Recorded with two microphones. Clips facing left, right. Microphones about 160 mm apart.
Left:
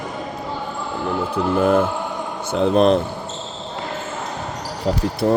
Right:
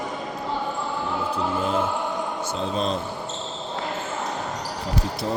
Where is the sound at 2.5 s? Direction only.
65° left (ahead or behind).